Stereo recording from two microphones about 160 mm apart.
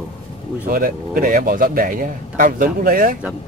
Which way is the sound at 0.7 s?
60° right (ahead or behind).